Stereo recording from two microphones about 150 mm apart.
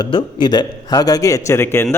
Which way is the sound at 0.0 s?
30° left (ahead or behind).